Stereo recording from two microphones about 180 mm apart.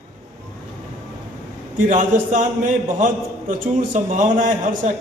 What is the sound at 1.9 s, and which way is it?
A man's voice, 45° right (ahead or behind).